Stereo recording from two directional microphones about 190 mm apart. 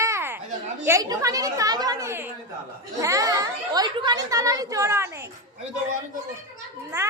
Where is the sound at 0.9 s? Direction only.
15° right (ahead or behind).